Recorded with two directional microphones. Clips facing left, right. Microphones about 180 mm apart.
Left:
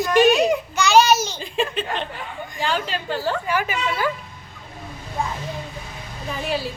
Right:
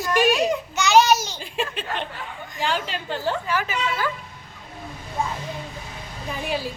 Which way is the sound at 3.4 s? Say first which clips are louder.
Left 2 dB; 15° left (ahead or behind).